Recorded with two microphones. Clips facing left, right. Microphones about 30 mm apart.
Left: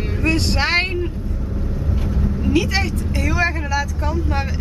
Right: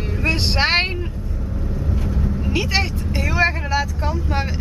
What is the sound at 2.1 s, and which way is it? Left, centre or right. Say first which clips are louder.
Vehicle: left 5 dB; centre.